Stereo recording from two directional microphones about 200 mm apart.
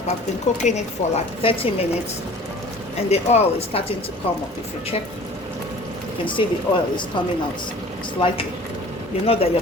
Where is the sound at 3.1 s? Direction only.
30° left (ahead or behind).